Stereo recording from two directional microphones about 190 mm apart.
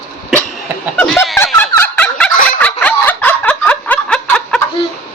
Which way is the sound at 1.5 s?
10° left (ahead or behind).